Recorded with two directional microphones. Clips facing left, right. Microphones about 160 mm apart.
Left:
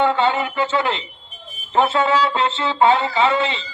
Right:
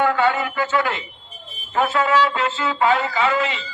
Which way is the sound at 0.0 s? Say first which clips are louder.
Left 1 dB; 25° left (ahead or behind).